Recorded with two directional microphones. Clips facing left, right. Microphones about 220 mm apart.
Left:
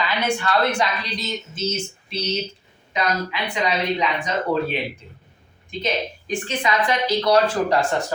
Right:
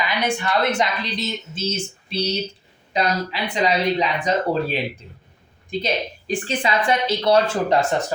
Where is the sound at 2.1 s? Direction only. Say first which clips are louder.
Right 2 dB; 35° right (ahead or behind).